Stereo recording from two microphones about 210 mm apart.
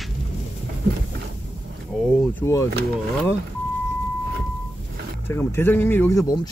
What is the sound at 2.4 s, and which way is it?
Speech, 15° left (ahead or behind).